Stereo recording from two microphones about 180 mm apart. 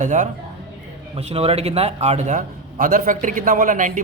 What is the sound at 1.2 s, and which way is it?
A man's voice, 35° right (ahead or behind).